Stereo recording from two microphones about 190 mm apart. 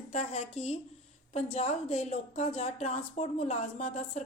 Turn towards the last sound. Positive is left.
turn(degrees=35)  # may be behind; listen again after turning